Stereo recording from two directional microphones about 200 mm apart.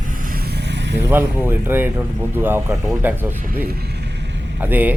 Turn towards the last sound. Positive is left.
turn(degrees=-10)  # may be behind; listen again after turning